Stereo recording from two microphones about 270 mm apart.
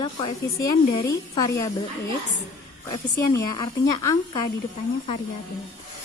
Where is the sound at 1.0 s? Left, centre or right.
Centre.